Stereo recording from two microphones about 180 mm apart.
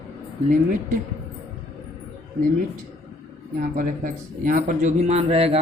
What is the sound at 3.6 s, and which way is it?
Speech, 45° right (ahead or behind).